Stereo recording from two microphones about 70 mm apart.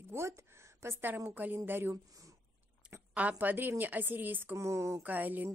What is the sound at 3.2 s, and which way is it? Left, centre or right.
A woman's voice, right.